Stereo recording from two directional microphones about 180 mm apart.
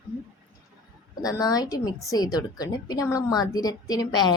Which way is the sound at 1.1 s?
20° left (ahead or behind).